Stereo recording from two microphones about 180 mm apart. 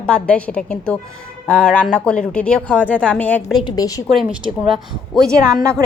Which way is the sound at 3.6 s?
20° left (ahead or behind).